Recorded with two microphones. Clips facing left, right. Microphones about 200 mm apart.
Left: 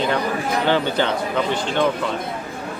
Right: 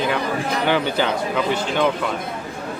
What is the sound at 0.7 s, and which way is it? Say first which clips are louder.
Speech: even; 10° right (ahead or behind).